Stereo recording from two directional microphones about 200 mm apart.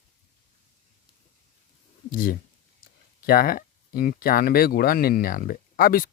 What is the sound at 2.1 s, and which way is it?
Speech, 45° left (ahead or behind).